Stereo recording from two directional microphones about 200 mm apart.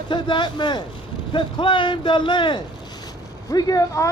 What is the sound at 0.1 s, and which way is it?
Speech, 25° left (ahead or behind).